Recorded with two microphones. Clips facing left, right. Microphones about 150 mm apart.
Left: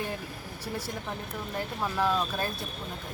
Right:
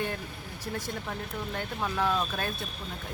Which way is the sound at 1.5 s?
5° left (ahead or behind).